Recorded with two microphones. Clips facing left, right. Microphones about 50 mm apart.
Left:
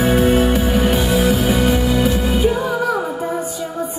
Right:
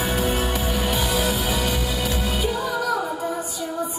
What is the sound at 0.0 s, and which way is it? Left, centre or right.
Music, left.